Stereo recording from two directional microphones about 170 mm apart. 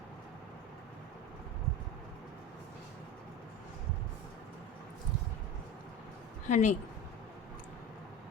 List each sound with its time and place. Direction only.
6.5 s a woman's voice: 45° left (ahead or behind)